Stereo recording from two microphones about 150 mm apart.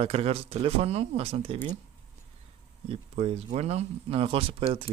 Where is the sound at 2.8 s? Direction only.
40° right (ahead or behind).